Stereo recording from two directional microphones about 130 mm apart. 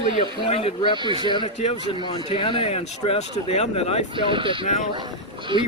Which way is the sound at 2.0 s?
40° left (ahead or behind).